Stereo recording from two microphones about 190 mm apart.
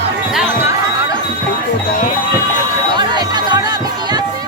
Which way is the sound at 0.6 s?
15° right (ahead or behind).